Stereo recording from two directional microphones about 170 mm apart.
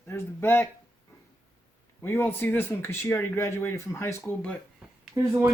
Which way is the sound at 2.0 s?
10° left (ahead or behind).